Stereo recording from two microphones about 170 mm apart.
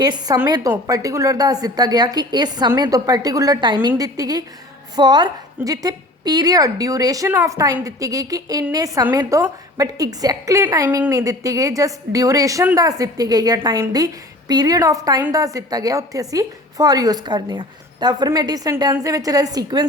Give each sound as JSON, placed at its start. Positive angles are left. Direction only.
{"t": 0.0, "sound": "a woman's voice", "side_deg": -25}